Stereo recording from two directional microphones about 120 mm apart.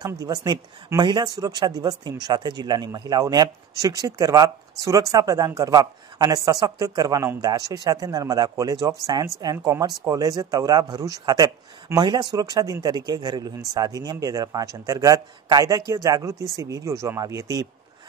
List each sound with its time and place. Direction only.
0.0 s a man's voice: 30° right (ahead or behind)